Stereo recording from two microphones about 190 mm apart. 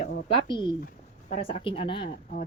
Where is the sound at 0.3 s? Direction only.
25° left (ahead or behind).